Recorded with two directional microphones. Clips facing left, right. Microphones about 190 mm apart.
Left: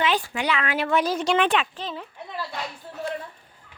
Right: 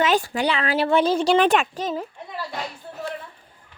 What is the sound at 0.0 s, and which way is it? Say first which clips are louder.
Speech: right 4 dB; 45° right (ahead or behind).